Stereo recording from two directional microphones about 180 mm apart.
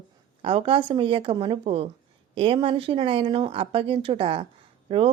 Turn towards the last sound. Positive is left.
turn(degrees=-30)  # may be behind; listen again after turning